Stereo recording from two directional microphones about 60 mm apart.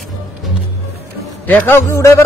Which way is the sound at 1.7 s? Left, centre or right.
Left.